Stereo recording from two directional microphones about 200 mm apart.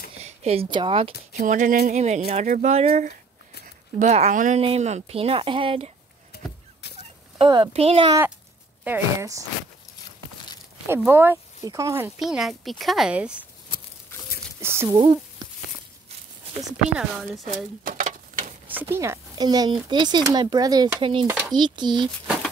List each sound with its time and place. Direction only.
0.2 s speech: 30° right (ahead or behind)
1.3 s speech: 40° right (ahead or behind)
6.8 s fowl: 55° left (ahead or behind)
7.3 s speech: 25° right (ahead or behind)
8.8 s speech: 10° right (ahead or behind)
10.9 s speech: 10° right (ahead or behind)
12.2 s speech: centre (ahead or behind)
14.6 s a sound: 10° right (ahead or behind)
15.0 s speech: 25° right (ahead or behind)
16.6 s speech: centre (ahead or behind)
17.8 s a sound: 45° right (ahead or behind)
18.7 s speech: 10° right (ahead or behind)